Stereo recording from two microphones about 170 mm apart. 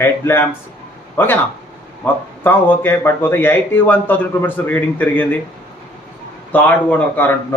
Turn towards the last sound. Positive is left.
turn(degrees=10)  # may be behind; listen again after turning